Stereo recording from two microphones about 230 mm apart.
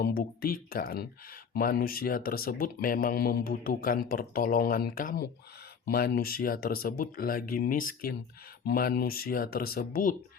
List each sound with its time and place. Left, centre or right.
0.0 s speech: left